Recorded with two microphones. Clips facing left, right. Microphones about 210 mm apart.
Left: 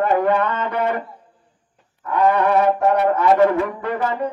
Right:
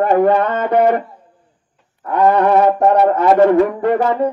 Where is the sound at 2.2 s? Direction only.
40° right (ahead or behind).